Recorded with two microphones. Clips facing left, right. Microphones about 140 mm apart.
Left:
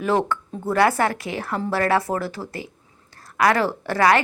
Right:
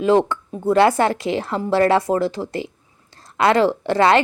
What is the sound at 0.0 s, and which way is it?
A woman's voice, 20° right (ahead or behind).